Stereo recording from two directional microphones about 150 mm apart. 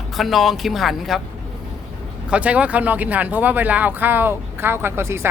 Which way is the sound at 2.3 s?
10° right (ahead or behind).